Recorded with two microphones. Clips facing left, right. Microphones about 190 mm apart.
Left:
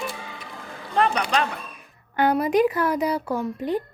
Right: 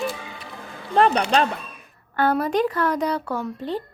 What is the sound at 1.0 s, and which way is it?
Speech, 35° right (ahead or behind).